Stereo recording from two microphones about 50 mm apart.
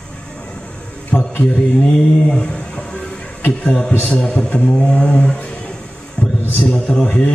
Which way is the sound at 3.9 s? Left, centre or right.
Left.